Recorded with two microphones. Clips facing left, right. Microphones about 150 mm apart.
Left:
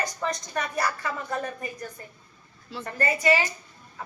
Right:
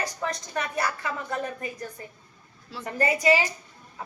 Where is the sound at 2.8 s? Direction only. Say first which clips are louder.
Right 2 dB; 15° right (ahead or behind).